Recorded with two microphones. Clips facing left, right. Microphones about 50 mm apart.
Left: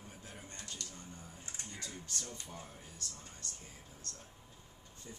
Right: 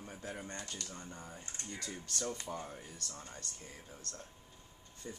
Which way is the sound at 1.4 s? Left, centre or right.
Centre.